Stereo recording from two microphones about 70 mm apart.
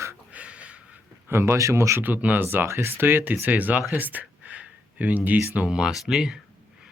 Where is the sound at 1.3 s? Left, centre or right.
Right.